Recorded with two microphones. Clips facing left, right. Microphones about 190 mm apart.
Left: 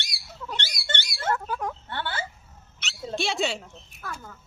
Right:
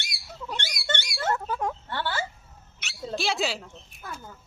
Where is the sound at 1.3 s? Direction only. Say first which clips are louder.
Even; 25° right (ahead or behind).